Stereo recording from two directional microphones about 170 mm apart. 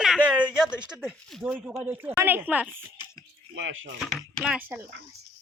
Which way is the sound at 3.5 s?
90° right.